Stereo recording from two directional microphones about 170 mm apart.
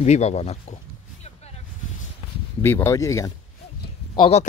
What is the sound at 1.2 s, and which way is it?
Vehicle, 40° left (ahead or behind).